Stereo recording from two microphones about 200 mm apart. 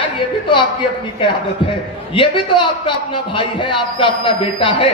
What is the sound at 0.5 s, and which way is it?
A man's voice, 25° left (ahead or behind).